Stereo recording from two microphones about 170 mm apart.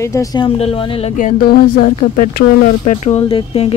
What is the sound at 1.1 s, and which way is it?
Speech, 55° left (ahead or behind).